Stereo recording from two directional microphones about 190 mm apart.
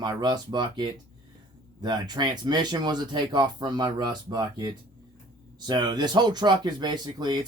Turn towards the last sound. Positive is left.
turn(degrees=-20)  # may be behind; listen again after turning